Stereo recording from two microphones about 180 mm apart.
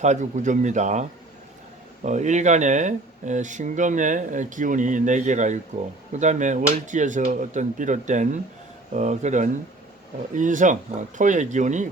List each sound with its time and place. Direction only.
0.0 s a man's voice: 40° right (ahead or behind)
2.0 s a man's voice: 40° right (ahead or behind)